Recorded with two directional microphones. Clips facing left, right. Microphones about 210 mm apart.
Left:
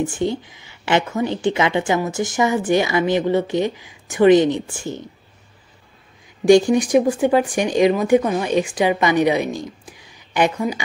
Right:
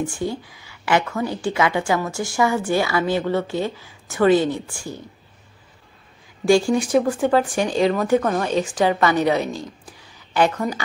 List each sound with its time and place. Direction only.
0.0 s speech: 20° left (ahead or behind)
6.4 s speech: 20° left (ahead or behind)